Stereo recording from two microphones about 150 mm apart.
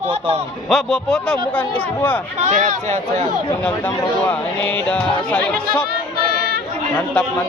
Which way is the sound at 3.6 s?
10° left (ahead or behind).